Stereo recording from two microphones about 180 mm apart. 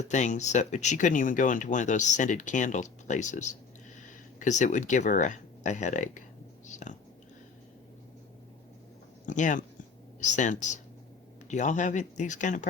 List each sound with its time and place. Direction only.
0.0 s speech: 40° left (ahead or behind)
6.7 s a sound: 45° left (ahead or behind)
9.2 s speech: 45° left (ahead or behind)